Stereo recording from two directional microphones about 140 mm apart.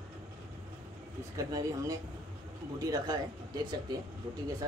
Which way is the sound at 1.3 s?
25° right (ahead or behind).